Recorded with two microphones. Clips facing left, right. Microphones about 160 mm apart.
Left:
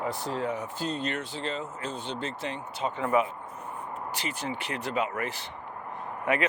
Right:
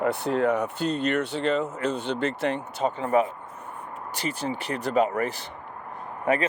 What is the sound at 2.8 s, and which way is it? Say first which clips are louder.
Speech: right 3 dB; 40° right (ahead or behind).